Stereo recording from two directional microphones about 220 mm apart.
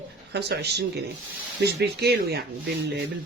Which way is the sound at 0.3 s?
50° right (ahead or behind).